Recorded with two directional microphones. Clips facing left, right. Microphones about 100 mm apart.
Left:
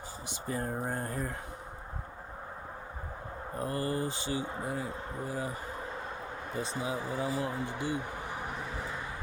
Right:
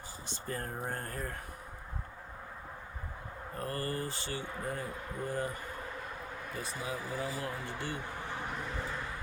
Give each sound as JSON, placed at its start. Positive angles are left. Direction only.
{"t": 0.3, "sound": "speech", "side_deg": 15}
{"t": 3.5, "sound": "speech", "side_deg": 20}
{"t": 4.9, "sound": "speech", "side_deg": 25}
{"t": 5.2, "sound": "speech", "side_deg": 10}
{"t": 6.5, "sound": "speech", "side_deg": 25}